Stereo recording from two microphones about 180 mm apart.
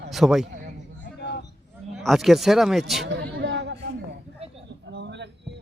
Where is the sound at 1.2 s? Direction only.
70° left (ahead or behind).